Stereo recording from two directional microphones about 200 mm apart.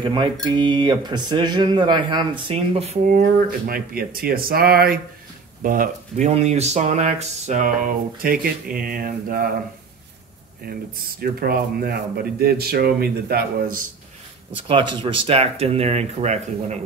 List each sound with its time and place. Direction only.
0.0 s speech: 25° right (ahead or behind); by 9.5 s 45° right (ahead or behind)
10.7 s speech: 50° right (ahead or behind)
14.7 s speech: 25° right (ahead or behind)